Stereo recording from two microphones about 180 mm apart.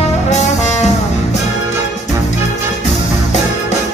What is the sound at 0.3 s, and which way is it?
Brass instrument, 40° left (ahead or behind).